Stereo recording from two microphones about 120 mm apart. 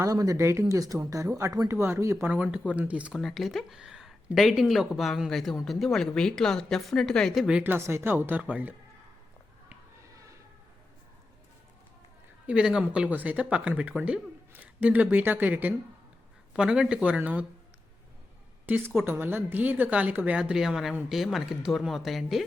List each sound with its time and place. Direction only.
0.0 s speech: 30° right (ahead or behind)
2.3 s speech: 10° right (ahead or behind)
3.2 s speech: centre (ahead or behind)
7.4 s speech: 10° right (ahead or behind)
10.2 s a sound: 25° right (ahead or behind)
12.5 s speech: 5° right (ahead or behind)
18.6 s speech: 15° right (ahead or behind); by 22.4 s centre (ahead or behind)